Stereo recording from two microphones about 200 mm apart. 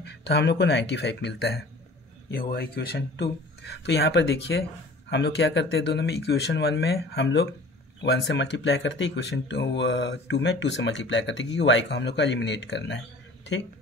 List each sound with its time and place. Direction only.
0.0 s speech: 55° left (ahead or behind)